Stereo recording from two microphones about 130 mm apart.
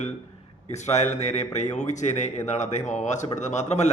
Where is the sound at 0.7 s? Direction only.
60° left (ahead or behind).